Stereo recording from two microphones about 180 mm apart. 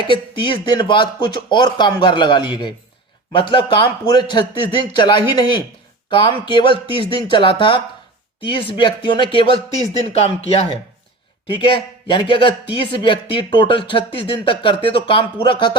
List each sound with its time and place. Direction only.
0.1 s speech: 25° left (ahead or behind)
11.6 s speech: 25° left (ahead or behind)